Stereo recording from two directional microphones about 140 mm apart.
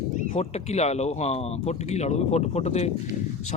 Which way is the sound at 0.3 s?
50° left (ahead or behind).